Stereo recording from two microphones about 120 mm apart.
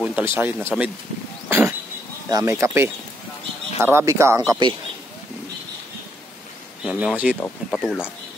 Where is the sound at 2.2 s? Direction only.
25° right (ahead or behind).